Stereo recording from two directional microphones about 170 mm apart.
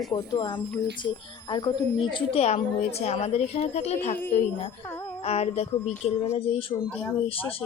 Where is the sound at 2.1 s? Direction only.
30° left (ahead or behind).